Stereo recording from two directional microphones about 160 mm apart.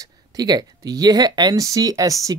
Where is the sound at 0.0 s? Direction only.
25° right (ahead or behind).